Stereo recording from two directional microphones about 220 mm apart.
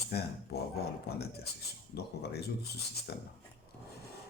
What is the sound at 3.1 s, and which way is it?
Speech, 45° left (ahead or behind).